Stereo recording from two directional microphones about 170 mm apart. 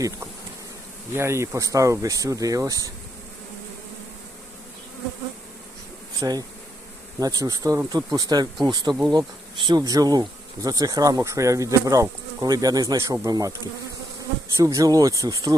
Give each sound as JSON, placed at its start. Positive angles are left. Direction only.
{"t": 1.1, "sound": "speech", "side_deg": -15}
{"t": 6.1, "sound": "speech", "side_deg": -20}
{"t": 14.5, "sound": "speech", "side_deg": -20}